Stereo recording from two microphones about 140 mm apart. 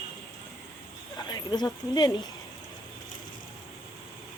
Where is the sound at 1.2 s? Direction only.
30° left (ahead or behind).